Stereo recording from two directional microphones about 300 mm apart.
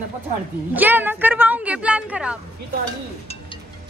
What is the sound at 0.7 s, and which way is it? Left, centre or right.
A woman's voice, centre.